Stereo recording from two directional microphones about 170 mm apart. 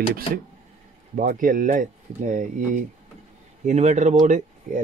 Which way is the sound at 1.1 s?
55° right (ahead or behind).